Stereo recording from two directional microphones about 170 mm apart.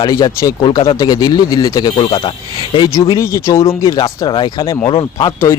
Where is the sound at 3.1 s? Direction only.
20° left (ahead or behind).